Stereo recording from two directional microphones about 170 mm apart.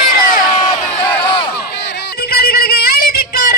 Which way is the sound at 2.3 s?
65° left (ahead or behind).